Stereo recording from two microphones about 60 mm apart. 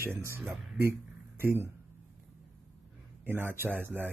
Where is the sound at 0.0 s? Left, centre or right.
Right.